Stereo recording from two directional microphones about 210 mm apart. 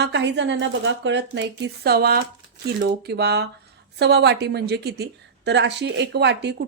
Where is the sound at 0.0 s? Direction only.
55° right (ahead or behind).